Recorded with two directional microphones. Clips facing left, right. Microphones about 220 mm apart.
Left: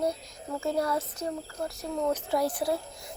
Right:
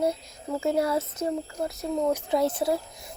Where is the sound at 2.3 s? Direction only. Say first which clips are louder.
Right 4 dB; 25° right (ahead or behind).